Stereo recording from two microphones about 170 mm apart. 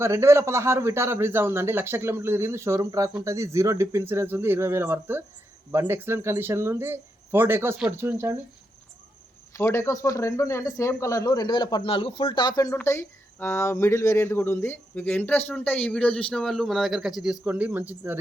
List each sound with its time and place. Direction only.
0.0 s a man's voice: 15° right (ahead or behind)
9.5 s a man's voice: 15° left (ahead or behind); by 18.2 s 10° right (ahead or behind)